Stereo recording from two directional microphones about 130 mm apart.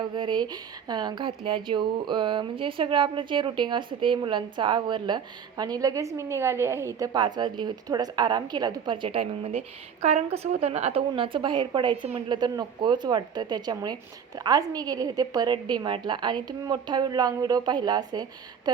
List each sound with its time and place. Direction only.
0.0 s speech: 35° right (ahead or behind); by 11.0 s 55° right (ahead or behind)
11.1 s speech: 40° right (ahead or behind)